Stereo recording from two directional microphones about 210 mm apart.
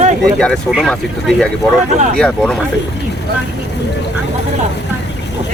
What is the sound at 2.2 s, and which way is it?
Speech, 5° left (ahead or behind).